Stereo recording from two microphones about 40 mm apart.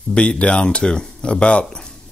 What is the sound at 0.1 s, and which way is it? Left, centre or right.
Speech, left.